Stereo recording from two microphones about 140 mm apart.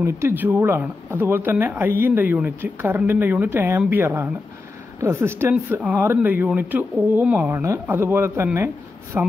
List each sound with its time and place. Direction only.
0.0 s speech: 15° right (ahead or behind)